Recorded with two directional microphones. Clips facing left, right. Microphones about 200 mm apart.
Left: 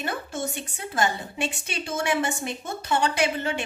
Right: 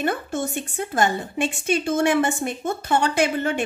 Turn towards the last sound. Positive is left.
turn(degrees=-50)  # may be behind; listen again after turning